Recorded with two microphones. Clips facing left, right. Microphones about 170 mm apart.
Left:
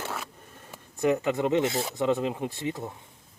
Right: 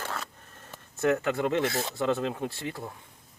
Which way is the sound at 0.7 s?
15° left (ahead or behind).